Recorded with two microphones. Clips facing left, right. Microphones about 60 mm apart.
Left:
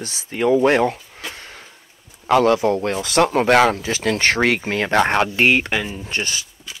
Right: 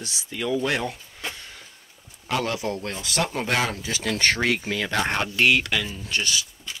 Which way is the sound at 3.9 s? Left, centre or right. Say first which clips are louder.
Left 5 dB; left.